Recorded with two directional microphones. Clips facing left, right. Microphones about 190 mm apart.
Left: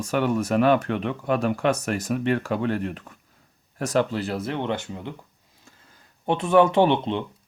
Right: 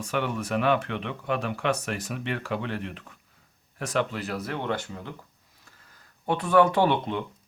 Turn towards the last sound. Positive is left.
turn(degrees=25)  # may be behind; listen again after turning